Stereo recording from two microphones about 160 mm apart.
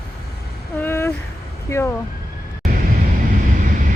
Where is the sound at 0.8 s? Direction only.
15° left (ahead or behind).